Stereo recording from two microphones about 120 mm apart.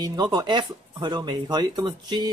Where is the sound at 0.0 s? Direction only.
35° right (ahead or behind).